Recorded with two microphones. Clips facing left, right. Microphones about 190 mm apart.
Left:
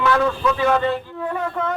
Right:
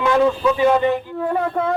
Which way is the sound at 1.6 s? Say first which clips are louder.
Right 2 dB; 35° right (ahead or behind).